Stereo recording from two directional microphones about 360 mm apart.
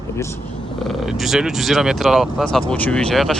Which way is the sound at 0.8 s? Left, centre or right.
Centre.